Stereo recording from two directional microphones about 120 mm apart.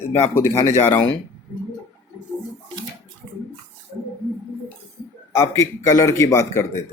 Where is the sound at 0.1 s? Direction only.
20° left (ahead or behind).